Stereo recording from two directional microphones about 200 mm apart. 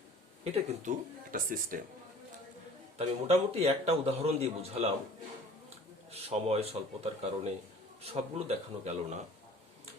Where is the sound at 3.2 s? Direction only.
30° right (ahead or behind).